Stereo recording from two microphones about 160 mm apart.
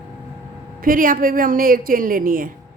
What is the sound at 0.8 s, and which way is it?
A woman's voice, 60° right (ahead or behind).